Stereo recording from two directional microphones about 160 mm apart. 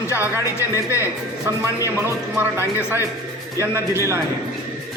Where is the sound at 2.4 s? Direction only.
15° right (ahead or behind).